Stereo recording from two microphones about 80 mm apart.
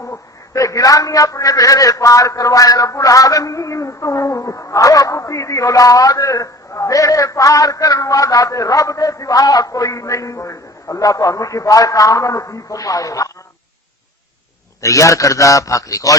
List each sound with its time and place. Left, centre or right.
0.0 s a man's voice: left
14.8 s a man's voice: left